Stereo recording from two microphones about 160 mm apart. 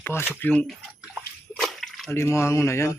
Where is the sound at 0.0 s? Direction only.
15° left (ahead or behind).